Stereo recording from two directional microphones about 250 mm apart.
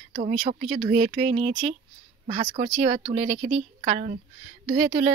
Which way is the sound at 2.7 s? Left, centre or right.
Right.